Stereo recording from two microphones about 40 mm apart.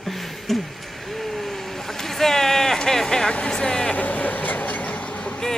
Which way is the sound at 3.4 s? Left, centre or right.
Centre.